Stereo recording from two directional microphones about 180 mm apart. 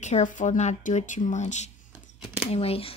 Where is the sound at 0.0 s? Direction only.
40° left (ahead or behind).